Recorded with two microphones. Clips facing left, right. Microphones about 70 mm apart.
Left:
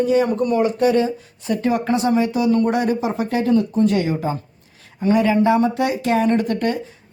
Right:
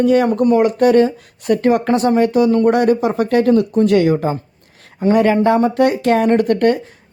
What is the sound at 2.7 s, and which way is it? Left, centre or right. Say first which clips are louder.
Speech: right 6 dB; right.